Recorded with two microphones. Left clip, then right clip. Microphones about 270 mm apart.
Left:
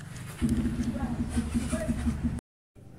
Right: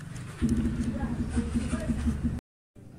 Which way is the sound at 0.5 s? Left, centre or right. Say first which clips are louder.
Even; left.